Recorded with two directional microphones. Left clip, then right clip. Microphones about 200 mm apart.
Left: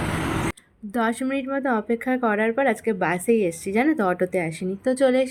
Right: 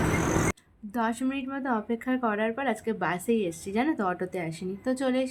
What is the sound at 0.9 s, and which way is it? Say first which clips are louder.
A woman's voice: left 5 dB; 20° left (ahead or behind).